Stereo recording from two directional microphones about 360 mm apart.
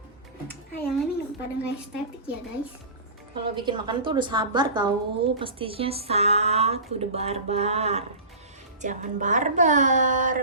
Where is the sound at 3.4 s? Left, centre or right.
Centre.